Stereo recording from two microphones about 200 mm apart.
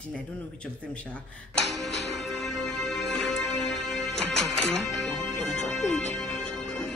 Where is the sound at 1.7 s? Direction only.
60° left (ahead or behind).